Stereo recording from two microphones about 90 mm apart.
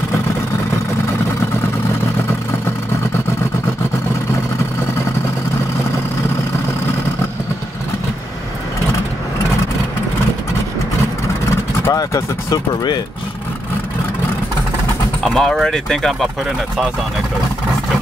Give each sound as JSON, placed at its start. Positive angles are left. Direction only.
{"t": 11.9, "sound": "speech", "side_deg": 40}
{"t": 15.2, "sound": "speech", "side_deg": 5}